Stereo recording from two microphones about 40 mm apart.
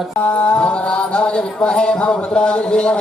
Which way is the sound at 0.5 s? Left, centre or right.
Left.